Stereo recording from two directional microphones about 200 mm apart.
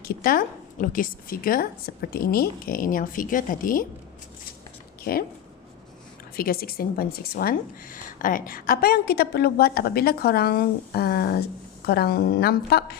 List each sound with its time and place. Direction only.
0.0 s speech: 50° left (ahead or behind)
5.1 s speech: 50° left (ahead or behind)
6.3 s speech: 50° left (ahead or behind)